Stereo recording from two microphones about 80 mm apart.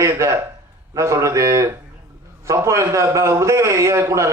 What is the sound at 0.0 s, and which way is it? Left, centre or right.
A man's voice, right.